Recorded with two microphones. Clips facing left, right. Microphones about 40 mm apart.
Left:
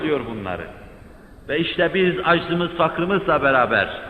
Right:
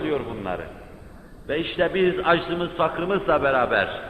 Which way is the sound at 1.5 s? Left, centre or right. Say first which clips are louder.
Left 3 dB; left.